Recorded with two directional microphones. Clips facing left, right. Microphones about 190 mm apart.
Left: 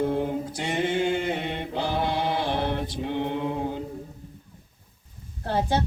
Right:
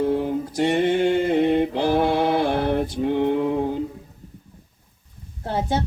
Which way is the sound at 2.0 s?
55° right (ahead or behind).